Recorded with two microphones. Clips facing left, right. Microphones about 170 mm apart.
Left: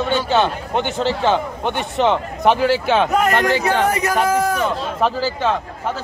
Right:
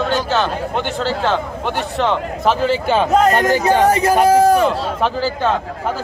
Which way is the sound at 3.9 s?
30° right (ahead or behind).